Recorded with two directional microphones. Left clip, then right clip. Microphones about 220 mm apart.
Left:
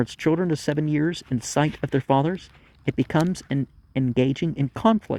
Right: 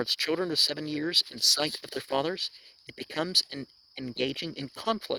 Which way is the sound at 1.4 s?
20° right (ahead or behind).